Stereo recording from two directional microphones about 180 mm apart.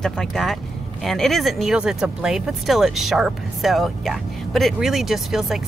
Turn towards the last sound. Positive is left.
turn(degrees=0)  # may be behind; listen again after turning